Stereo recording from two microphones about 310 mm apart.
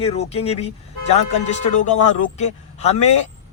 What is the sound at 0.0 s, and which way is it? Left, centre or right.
Speech, centre.